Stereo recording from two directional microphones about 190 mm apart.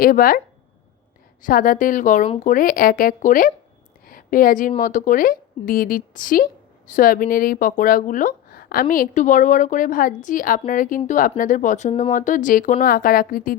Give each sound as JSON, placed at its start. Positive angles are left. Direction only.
{"t": 0.0, "sound": "speech", "side_deg": 50}
{"t": 1.4, "sound": "speech", "side_deg": 45}
{"t": 4.0, "sound": "a sound", "side_deg": 45}
{"t": 4.7, "sound": "speech", "side_deg": 40}